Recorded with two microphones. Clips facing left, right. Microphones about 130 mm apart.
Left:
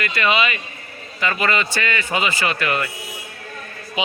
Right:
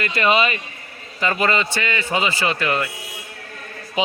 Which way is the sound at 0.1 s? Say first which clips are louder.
Right 3 dB; 40° right (ahead or behind).